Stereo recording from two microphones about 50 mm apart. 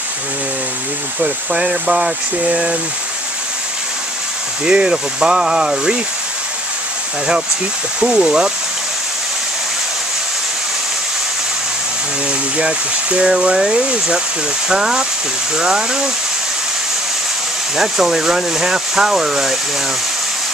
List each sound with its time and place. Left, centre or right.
1.2 s speech: centre
4.6 s speech: right
8.0 s speech: centre
12.3 s speech: right
17.7 s speech: centre